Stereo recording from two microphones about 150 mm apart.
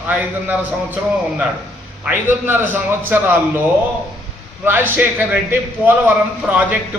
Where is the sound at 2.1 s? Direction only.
15° right (ahead or behind).